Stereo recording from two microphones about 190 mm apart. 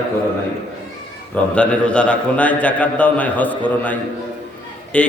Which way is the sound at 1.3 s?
5° left (ahead or behind).